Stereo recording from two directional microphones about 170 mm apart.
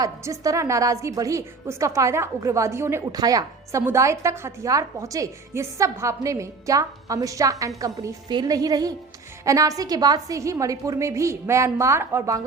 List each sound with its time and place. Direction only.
0.0 s a woman's voice: 20° right (ahead or behind)